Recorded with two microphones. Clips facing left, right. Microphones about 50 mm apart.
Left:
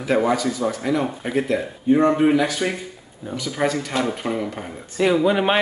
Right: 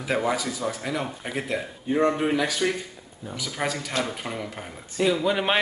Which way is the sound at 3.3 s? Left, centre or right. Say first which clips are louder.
Left 6 dB; centre.